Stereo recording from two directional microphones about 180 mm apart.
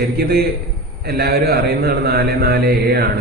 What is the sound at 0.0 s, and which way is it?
Speech, 60° right (ahead or behind).